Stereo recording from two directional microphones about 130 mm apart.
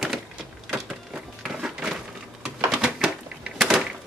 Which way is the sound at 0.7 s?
5° right (ahead or behind).